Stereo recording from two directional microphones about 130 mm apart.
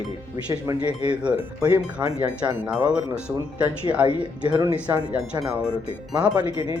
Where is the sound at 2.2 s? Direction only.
10° right (ahead or behind).